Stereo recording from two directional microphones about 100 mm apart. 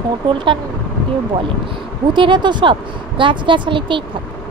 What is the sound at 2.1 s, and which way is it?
Speech, 50° right (ahead or behind).